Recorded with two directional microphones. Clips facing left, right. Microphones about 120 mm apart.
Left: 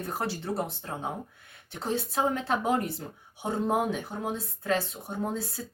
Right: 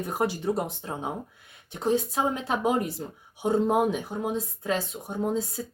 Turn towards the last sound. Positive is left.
turn(degrees=-15)  # may be behind; listen again after turning